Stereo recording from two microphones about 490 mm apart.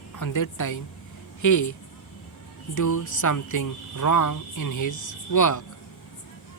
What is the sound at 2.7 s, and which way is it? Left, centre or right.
Speech, left.